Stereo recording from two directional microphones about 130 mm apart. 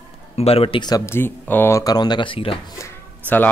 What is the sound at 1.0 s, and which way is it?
Speech, 15° left (ahead or behind).